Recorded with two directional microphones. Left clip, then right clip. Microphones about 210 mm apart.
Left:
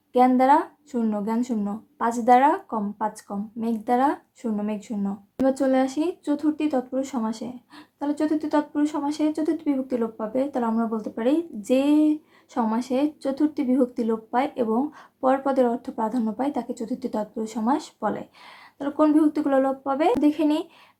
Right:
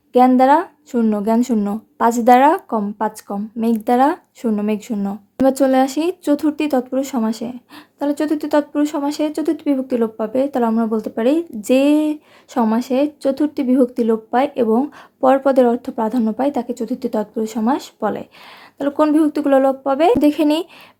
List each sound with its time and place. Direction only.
0.1 s speech: 35° right (ahead or behind)